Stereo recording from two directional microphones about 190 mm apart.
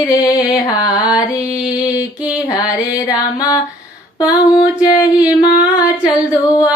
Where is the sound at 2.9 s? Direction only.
20° left (ahead or behind).